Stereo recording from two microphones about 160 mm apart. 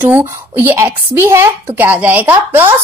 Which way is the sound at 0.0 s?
15° right (ahead or behind).